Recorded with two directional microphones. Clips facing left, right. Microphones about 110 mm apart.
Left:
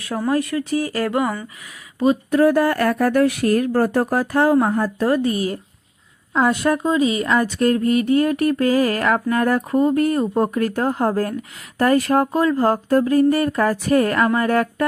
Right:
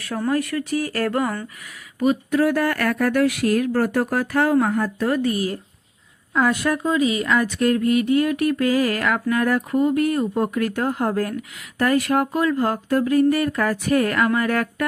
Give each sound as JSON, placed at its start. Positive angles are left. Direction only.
{"t": 0.0, "sound": "speech", "side_deg": 20}
{"t": 2.0, "sound": "speech", "side_deg": 35}